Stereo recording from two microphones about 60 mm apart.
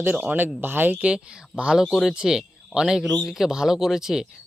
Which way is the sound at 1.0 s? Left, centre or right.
Centre.